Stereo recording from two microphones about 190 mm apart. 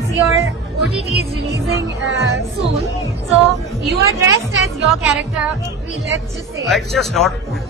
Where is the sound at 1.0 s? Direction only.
35° left (ahead or behind).